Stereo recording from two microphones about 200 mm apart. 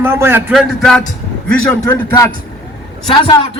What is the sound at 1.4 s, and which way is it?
Speech, 10° left (ahead or behind).